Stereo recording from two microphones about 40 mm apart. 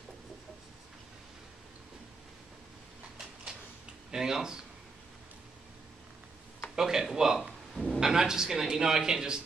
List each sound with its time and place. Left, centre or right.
4.1 s speech: centre
6.7 s speech: centre
7.3 s a sound: centre
8.0 s speech: centre